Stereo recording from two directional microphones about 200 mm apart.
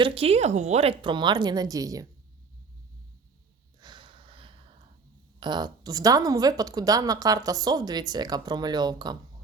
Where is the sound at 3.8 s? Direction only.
20° right (ahead or behind).